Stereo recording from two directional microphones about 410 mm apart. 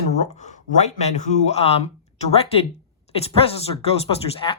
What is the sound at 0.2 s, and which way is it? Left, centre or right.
Speech, centre.